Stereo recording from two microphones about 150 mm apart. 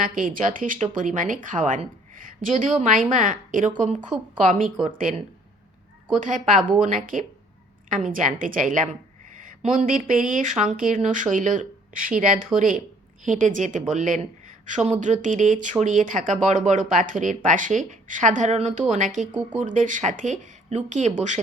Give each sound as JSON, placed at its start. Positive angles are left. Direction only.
{"t": 0.0, "sound": "a woman's voice", "side_deg": -65}